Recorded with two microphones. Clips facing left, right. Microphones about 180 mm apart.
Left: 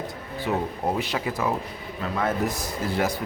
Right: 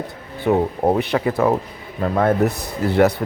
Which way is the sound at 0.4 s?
60° right (ahead or behind).